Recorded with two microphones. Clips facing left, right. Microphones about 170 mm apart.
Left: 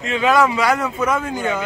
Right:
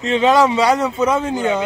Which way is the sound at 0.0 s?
30° right (ahead or behind).